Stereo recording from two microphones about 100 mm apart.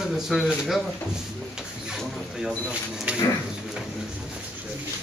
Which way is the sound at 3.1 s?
10° right (ahead or behind).